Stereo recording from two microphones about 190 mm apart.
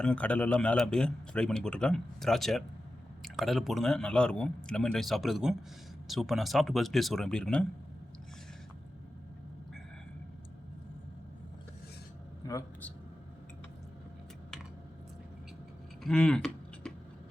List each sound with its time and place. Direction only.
0.0 s a man's voice: 5° left (ahead or behind)
12.5 s a man's voice: 15° left (ahead or behind)
16.0 s typing: 5° left (ahead or behind)